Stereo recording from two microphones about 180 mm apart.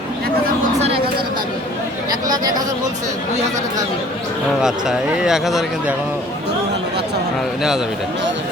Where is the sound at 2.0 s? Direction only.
20° right (ahead or behind).